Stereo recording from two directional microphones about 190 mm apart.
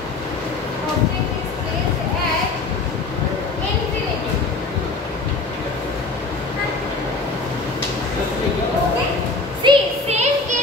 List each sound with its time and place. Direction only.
9.6 s music: 30° right (ahead or behind)